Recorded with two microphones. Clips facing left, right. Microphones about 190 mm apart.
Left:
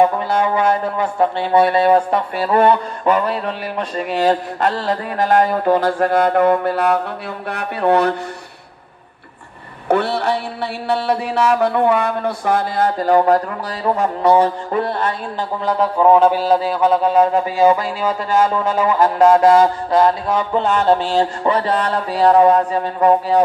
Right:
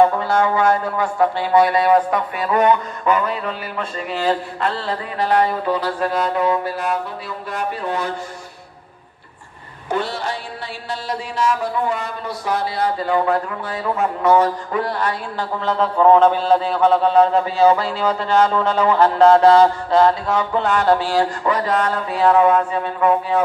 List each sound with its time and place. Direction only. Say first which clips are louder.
0.0 s speech: even; 20° left (ahead or behind)
4.2 s a sound: left 4 dB; 40° left (ahead or behind); by 7.0 s 60° left (ahead or behind)
7.4 s mantra: left 7 dB; 65° left (ahead or behind)
9.8 s mantra: left 6 dB; 65° left (ahead or behind); by 15.1 s 25° left (ahead or behind)
15.6 s mantra: left 1 dB; 10° left (ahead or behind)
21.1 s speech: left 2 dB; 25° left (ahead or behind)